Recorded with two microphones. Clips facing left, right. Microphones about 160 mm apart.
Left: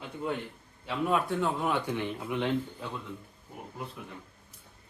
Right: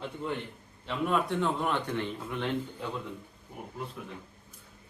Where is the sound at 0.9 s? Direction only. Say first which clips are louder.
Even; centre (ahead or behind).